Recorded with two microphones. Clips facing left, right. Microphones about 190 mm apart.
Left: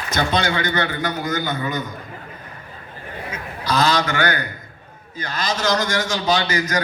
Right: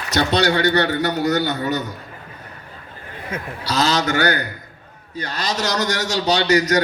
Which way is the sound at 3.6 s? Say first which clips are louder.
Left 1 dB; 40° right (ahead or behind).